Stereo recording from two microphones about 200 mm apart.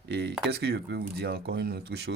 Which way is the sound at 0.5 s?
55° right (ahead or behind).